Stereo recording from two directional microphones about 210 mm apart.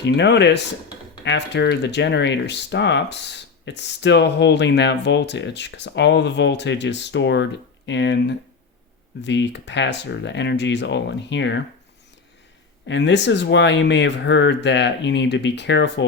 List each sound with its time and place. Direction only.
0.0 s speech: 55° left (ahead or behind)
12.9 s speech: 55° left (ahead or behind)